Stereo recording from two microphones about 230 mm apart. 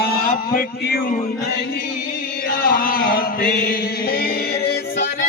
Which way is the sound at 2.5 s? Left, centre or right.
Left.